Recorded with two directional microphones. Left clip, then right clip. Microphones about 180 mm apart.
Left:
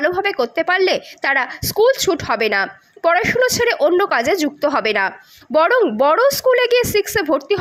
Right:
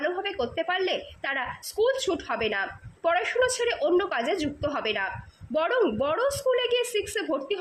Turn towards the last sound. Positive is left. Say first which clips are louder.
# left 11 dB
turn(degrees=25)  # may be behind; listen again after turning